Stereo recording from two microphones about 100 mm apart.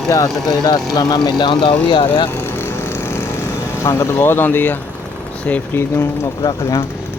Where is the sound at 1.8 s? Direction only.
60° left (ahead or behind).